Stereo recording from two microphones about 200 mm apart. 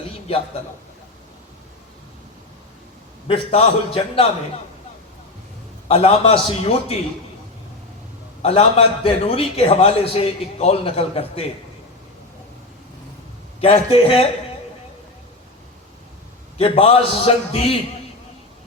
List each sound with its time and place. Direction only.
3.2 s a man's voice: 30° left (ahead or behind)
5.9 s a man's voice: 30° left (ahead or behind)
8.4 s a man's voice: 30° left (ahead or behind)
13.6 s a man's voice: 30° left (ahead or behind)
16.6 s a man's voice: 30° left (ahead or behind)